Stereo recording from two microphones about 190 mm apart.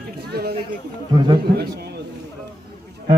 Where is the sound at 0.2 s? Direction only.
55° right (ahead or behind).